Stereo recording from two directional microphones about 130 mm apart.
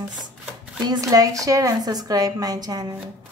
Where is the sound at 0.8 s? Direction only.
30° right (ahead or behind).